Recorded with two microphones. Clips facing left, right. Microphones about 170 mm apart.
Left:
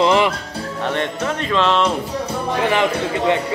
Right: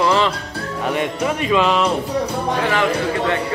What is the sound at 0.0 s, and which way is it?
Music, 20° left (ahead or behind).